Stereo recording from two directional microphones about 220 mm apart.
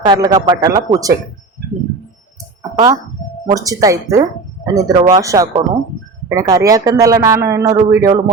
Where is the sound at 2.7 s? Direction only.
15° right (ahead or behind).